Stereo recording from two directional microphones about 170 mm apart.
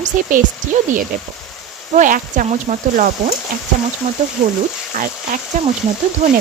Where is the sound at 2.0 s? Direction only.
50° right (ahead or behind).